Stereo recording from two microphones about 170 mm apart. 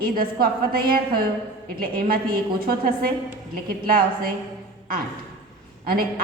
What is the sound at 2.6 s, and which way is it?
A woman's voice, 60° right (ahead or behind).